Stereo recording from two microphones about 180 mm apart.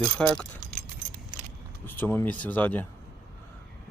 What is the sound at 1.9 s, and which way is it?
Speech, 10° left (ahead or behind).